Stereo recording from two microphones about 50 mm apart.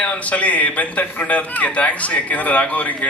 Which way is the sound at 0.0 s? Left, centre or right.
Left.